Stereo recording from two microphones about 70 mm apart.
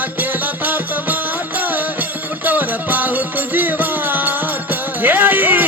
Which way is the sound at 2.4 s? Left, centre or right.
Right.